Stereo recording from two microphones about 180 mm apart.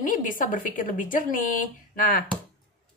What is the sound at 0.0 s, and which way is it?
A woman's voice, 45° left (ahead or behind).